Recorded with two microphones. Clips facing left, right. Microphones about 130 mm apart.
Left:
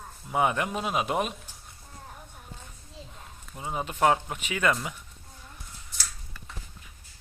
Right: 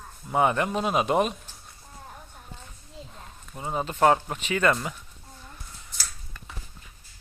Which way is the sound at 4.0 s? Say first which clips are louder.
Right 3 dB; 5° left (ahead or behind).